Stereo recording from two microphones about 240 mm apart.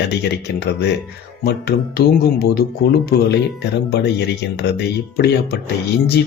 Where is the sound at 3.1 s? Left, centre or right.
Left.